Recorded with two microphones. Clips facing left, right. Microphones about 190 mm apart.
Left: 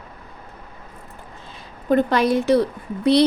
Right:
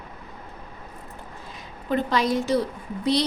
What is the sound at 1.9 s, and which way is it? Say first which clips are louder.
Speech: left 5 dB; 55° left (ahead or behind).